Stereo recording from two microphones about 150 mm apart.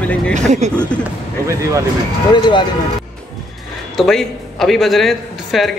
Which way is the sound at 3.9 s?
Centre (ahead or behind).